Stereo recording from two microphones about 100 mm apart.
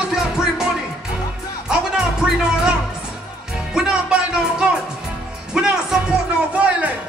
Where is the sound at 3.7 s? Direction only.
10° right (ahead or behind).